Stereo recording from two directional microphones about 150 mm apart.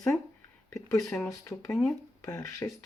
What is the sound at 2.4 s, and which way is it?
Speech, 20° left (ahead or behind).